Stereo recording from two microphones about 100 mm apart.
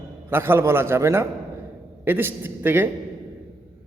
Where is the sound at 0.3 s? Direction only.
25° right (ahead or behind).